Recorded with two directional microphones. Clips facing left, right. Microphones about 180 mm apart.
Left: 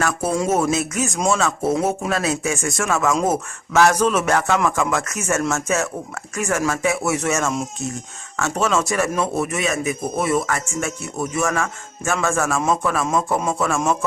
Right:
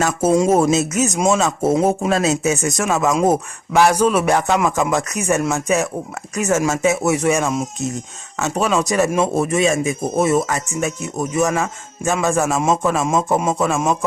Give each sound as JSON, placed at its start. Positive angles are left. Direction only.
{"t": 0.0, "sound": "a man's voice", "side_deg": -20}
{"t": 3.2, "sound": "music", "side_deg": -15}
{"t": 8.4, "sound": "a man's voice", "side_deg": -15}
{"t": 13.5, "sound": "music", "side_deg": -20}